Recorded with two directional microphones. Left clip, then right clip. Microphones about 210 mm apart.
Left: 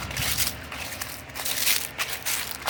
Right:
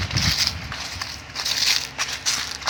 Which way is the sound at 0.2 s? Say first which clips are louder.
Right 7 dB; 5° left (ahead or behind).